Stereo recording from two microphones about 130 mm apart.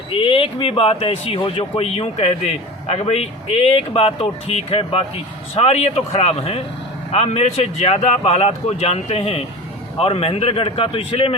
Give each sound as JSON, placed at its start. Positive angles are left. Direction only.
{"t": 0.1, "sound": "a man's voice", "side_deg": 45}